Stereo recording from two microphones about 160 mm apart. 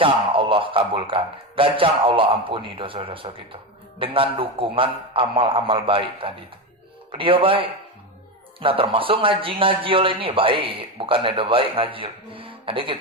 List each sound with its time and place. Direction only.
0.0 s a man's voice: 35° right (ahead or behind)
8.6 s a man's voice: 35° right (ahead or behind)